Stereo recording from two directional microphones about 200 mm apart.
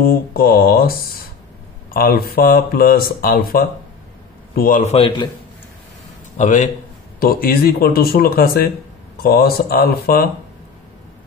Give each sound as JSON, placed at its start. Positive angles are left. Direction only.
{"t": 0.0, "sound": "a man's voice", "side_deg": 45}
{"t": 6.3, "sound": "a man's voice", "side_deg": 35}